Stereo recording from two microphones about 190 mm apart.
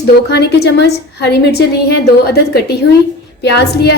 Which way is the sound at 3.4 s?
60° left (ahead or behind).